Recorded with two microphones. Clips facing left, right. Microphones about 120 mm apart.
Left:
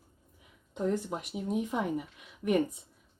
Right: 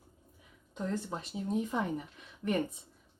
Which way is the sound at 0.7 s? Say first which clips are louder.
Left 5 dB; 15° left (ahead or behind).